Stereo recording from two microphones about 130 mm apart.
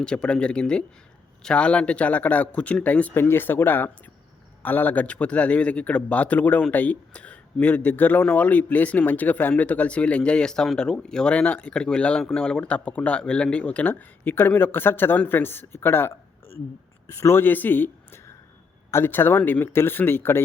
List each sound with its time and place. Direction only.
0.0 s speech: 5° left (ahead or behind)